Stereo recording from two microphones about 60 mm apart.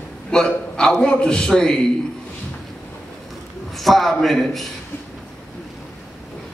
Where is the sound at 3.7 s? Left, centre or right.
Centre.